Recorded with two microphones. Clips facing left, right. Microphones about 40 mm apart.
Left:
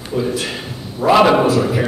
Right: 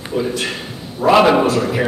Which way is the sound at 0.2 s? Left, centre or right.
Centre.